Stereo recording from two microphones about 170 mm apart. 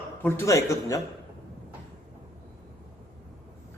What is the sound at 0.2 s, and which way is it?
Speech, 10° left (ahead or behind).